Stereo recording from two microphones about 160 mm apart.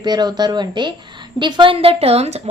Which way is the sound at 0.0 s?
25° right (ahead or behind).